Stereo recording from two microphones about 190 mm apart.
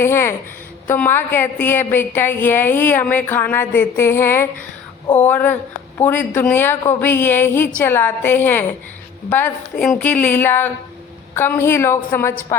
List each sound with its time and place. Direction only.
0.0 s a woman's voice: 15° left (ahead or behind)